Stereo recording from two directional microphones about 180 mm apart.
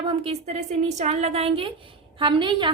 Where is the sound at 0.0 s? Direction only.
30° right (ahead or behind).